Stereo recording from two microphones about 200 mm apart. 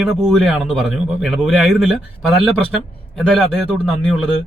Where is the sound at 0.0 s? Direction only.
Centre (ahead or behind).